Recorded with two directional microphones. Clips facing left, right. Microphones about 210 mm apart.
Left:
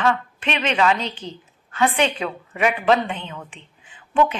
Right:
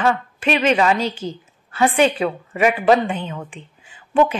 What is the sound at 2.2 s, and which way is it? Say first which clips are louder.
A woman's voice: right 4 dB; 45° right (ahead or behind).